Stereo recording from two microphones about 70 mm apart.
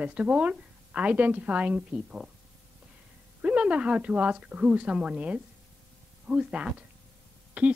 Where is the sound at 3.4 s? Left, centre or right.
Centre.